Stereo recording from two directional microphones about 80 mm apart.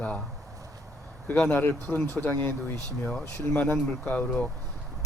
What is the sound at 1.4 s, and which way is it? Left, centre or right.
Speech, left.